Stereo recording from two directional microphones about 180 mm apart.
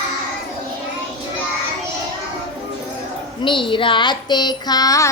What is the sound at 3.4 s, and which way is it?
Child singing, 25° left (ahead or behind).